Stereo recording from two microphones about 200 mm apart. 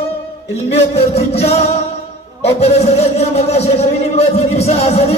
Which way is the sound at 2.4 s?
30° left (ahead or behind).